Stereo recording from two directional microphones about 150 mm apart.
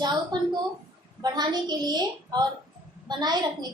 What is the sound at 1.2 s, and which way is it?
A woman's voice, 25° right (ahead or behind).